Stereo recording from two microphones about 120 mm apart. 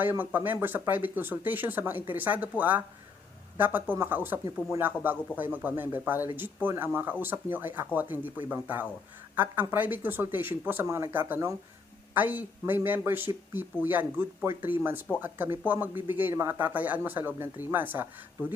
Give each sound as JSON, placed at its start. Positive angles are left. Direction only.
{"t": 0.0, "sound": "speech", "side_deg": -15}
{"t": 16.6, "sound": "speech", "side_deg": -15}